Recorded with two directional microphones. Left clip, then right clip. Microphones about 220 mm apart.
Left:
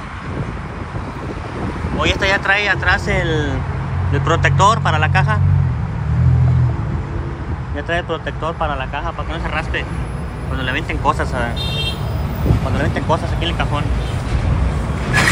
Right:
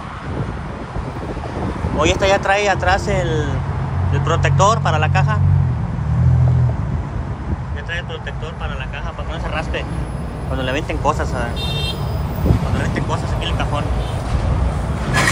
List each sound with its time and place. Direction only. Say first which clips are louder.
2.0 s speech: right 1 dB; 30° right (ahead or behind)
7.9 s speech: left 6 dB; 10° left (ahead or behind)
10.5 s speech: even; 25° right (ahead or behind)
11.1 s speech: left 2 dB; 5° right (ahead or behind)
13.1 s speech: left 4 dB; 15° right (ahead or behind)